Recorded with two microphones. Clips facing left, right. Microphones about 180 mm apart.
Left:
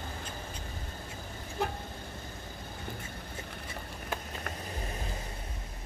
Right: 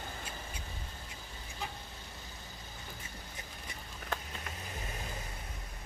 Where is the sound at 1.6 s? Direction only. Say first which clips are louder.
Left 9 dB; 60° left (ahead or behind).